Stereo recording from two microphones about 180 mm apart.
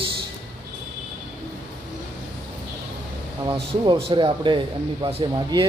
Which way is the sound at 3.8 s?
25° right (ahead or behind).